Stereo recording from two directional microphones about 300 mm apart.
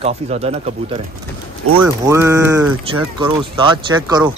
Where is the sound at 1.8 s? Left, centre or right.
Centre.